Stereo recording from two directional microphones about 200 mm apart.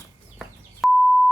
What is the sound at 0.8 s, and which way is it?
Beep, centre (ahead or behind).